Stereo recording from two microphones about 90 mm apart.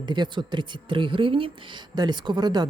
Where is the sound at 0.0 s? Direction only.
60° right (ahead or behind).